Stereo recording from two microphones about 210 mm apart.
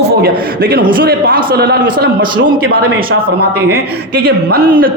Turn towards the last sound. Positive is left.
turn(degrees=-45)  # may be behind; listen again after turning